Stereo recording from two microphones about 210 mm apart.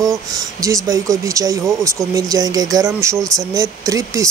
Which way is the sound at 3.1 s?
Centre (ahead or behind).